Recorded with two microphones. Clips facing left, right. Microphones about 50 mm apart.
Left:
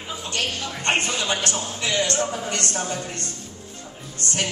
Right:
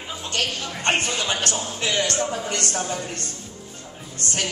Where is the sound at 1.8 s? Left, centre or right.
Right.